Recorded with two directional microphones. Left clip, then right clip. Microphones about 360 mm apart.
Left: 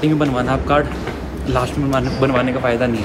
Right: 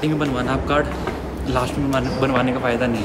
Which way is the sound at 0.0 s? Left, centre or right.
Centre.